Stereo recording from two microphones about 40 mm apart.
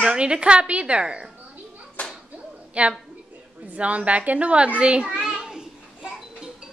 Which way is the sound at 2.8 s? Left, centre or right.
Right.